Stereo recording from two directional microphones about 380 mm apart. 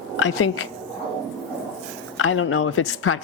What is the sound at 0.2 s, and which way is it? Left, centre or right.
Speech, left.